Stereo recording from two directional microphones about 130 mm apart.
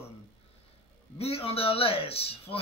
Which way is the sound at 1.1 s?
50° left (ahead or behind).